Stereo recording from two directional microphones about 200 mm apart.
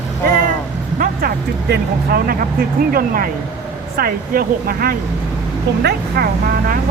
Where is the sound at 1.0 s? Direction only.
50° right (ahead or behind).